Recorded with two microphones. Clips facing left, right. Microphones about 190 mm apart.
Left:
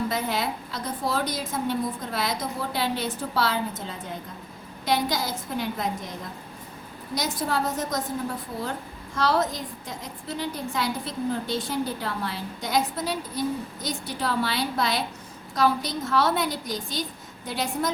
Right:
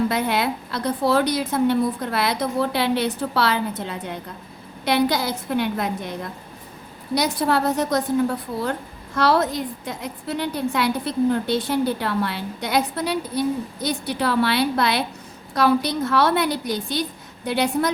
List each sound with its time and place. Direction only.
0.1 s a woman's voice: 70° right (ahead or behind)
9.1 s a woman's voice: 65° right (ahead or behind)